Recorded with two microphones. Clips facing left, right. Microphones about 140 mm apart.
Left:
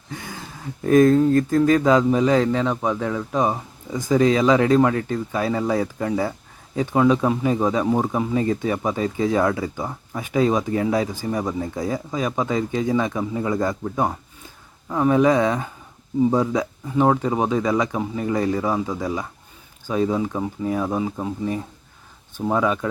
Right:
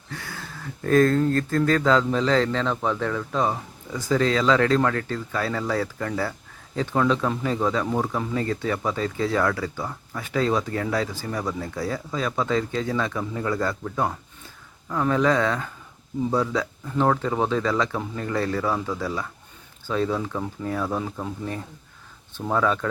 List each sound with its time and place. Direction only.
0.1 s speech: 20° left (ahead or behind)